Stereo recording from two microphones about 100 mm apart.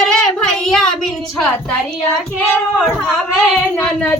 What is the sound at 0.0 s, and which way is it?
Child singing, 5° left (ahead or behind).